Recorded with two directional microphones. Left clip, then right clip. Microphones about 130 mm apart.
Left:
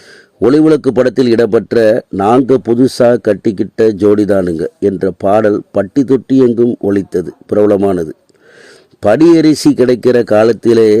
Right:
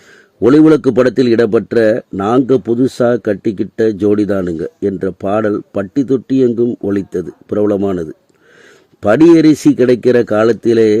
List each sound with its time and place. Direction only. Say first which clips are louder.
0.4 s a man's voice: even; 45° left (ahead or behind)
3.1 s speech: left 4 dB; 30° left (ahead or behind)
3.5 s a man's voice: left 3 dB; 50° left (ahead or behind); by 8.1 s 30° left (ahead or behind)
9.0 s speech: left 2 dB; 40° left (ahead or behind)
9.2 s a man's voice: right 1 dB; 60° left (ahead or behind)